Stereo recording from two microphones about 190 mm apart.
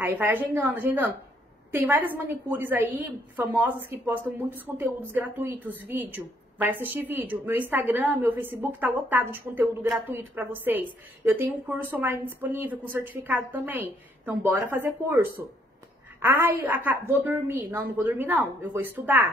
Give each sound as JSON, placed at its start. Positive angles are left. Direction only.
{"t": 0.0, "sound": "a woman's voice", "side_deg": -10}